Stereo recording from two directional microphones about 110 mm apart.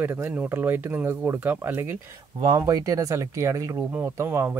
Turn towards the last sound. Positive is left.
turn(degrees=-20)  # may be behind; listen again after turning